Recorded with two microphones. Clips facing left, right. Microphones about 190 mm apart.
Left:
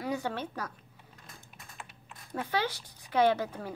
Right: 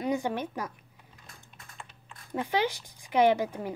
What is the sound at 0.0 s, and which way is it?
Speech, 15° right (ahead or behind).